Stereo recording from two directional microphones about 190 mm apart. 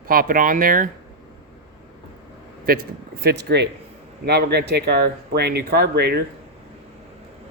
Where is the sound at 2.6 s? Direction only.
50° right (ahead or behind).